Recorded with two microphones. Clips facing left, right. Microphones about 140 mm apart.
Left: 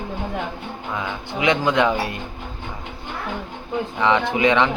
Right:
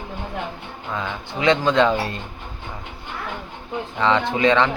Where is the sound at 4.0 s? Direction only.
15° left (ahead or behind).